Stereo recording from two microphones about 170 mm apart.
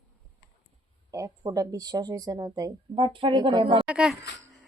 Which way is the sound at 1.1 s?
20° right (ahead or behind).